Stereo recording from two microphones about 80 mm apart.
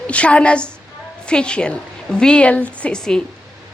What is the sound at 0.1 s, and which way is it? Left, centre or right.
A woman's voice, centre.